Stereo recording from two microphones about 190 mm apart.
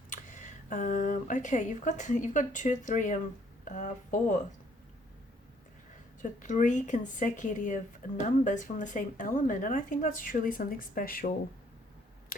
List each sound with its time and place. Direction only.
0.2 s speech: 45° left (ahead or behind)
6.2 s speech: 40° left (ahead or behind)